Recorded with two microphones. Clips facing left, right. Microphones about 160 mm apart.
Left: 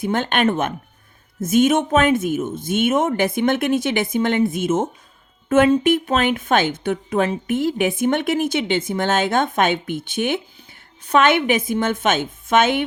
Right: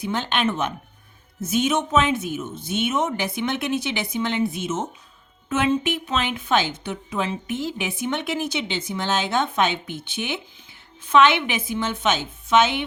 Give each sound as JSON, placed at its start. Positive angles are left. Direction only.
{"t": 0.0, "sound": "a woman's voice", "side_deg": 50}